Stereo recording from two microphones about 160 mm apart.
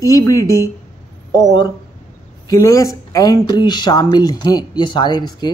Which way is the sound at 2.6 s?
20° left (ahead or behind).